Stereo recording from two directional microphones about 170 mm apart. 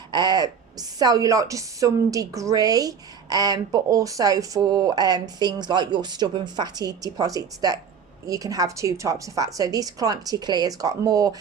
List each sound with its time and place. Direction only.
0.1 s a woman's voice: 25° right (ahead or behind)